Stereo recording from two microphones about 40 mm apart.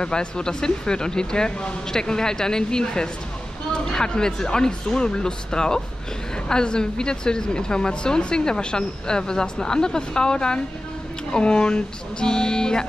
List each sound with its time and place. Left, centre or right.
0.0 s a woman's voice: left